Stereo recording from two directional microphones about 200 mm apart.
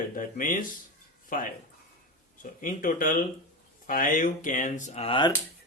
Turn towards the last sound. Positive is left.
turn(degrees=25)  # may be behind; listen again after turning